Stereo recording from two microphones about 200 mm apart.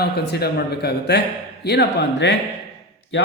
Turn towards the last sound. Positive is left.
turn(degrees=70)  # may be behind; listen again after turning